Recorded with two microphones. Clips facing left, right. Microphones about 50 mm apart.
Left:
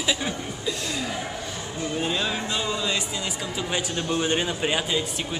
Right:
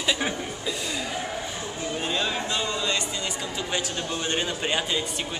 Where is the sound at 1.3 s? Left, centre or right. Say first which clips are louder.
Right 1 dB; centre.